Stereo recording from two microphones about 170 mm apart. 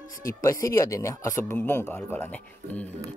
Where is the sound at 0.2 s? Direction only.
20° left (ahead or behind).